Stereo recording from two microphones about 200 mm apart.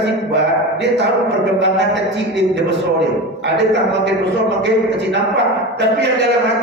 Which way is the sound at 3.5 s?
60° right (ahead or behind).